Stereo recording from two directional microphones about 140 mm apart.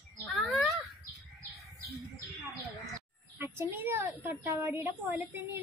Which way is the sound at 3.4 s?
15° right (ahead or behind).